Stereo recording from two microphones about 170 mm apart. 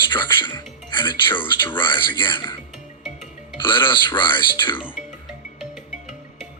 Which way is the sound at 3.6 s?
30° left (ahead or behind).